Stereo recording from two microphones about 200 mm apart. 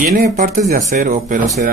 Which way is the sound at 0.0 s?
40° right (ahead or behind).